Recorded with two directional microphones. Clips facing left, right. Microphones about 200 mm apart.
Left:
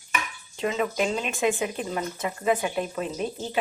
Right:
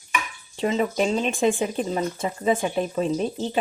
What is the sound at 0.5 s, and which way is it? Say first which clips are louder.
A woman's voice: right 3 dB; 30° right (ahead or behind).